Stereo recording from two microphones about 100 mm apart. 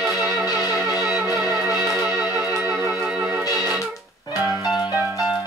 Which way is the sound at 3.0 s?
10° right (ahead or behind).